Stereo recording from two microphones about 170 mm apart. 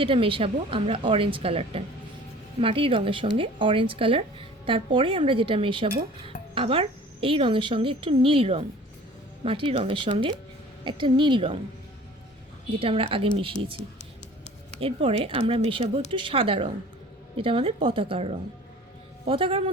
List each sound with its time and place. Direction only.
0.0 s a woman's voice: 30° right (ahead or behind)
12.8 s speech: 30° right (ahead or behind)
14.8 s speech: 35° right (ahead or behind)